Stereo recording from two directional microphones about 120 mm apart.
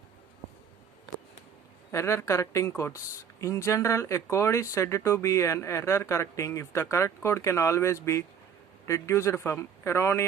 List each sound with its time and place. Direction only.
1.9 s speech: 25° left (ahead or behind)